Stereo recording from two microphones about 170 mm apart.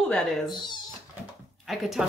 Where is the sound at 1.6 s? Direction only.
Centre (ahead or behind).